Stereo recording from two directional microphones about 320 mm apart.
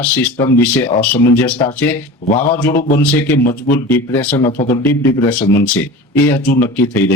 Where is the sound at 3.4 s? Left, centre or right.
Left.